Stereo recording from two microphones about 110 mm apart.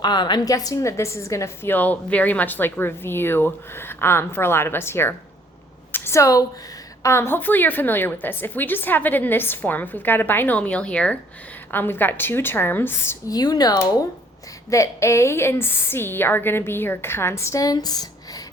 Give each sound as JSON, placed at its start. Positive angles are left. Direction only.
{"t": 0.0, "sound": "a woman's voice", "side_deg": 40}
{"t": 1.7, "sound": "a woman's voice", "side_deg": 15}
{"t": 13.3, "sound": "a woman's voice", "side_deg": 35}